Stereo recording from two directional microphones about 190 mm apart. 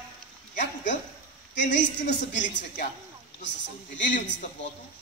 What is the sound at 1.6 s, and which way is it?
A man's voice, 70° left (ahead or behind).